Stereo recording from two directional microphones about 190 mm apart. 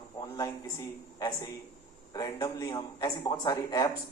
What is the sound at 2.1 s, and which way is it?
Speech, 20° left (ahead or behind).